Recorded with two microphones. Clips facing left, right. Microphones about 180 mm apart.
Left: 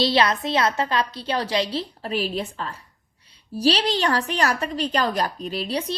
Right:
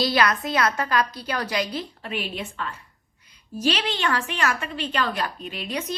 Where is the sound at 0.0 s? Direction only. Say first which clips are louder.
Left 2 dB; 25° left (ahead or behind).